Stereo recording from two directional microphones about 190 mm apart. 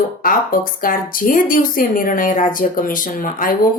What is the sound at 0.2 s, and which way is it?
Speech, 50° left (ahead or behind).